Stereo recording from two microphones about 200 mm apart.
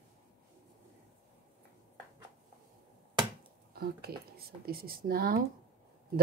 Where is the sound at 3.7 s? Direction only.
50° right (ahead or behind).